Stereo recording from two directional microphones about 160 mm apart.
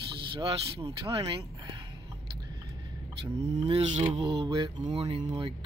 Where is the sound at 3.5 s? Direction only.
45° right (ahead or behind).